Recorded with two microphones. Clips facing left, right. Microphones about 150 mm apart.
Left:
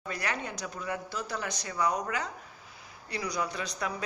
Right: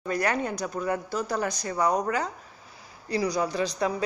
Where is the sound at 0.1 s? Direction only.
45° right (ahead or behind).